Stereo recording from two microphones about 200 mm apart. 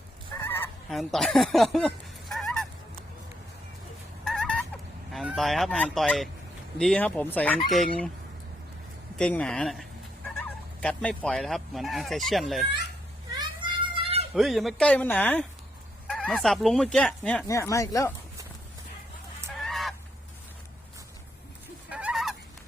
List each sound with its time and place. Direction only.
0.4 s fowl: 10° left (ahead or behind)
0.9 s speech: centre (ahead or behind)
2.3 s goose: centre (ahead or behind)
4.2 s fowl: 5° left (ahead or behind)
6.7 s speech: 5° left (ahead or behind)
9.1 s speech: 5° left (ahead or behind)
13.4 s a sound: 25° right (ahead or behind)
14.3 s speech: centre (ahead or behind); by 18.1 s 15° left (ahead or behind)
19.5 s fowl: centre (ahead or behind)
21.8 s fowl: 5° right (ahead or behind)